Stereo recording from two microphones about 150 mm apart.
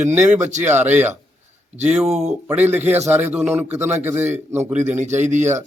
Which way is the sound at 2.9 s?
45° right (ahead or behind).